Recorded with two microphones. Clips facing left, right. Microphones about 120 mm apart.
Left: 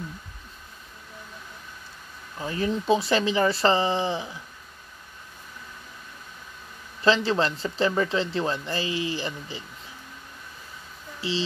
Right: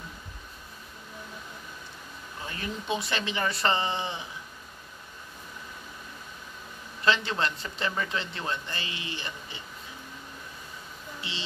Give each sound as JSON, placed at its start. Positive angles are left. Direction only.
{"t": 2.4, "sound": "speech", "side_deg": 30}
{"t": 7.1, "sound": "speech", "side_deg": 30}
{"t": 11.1, "sound": "speech", "side_deg": 30}